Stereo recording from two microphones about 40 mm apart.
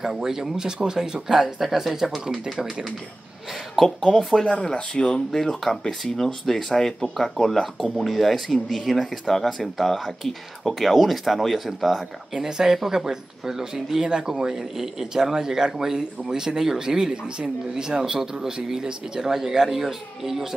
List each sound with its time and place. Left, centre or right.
0.0 s speech: centre
4.4 s speech: centre
4.7 s speech: left
5.3 s speech: centre
12.4 s speech: centre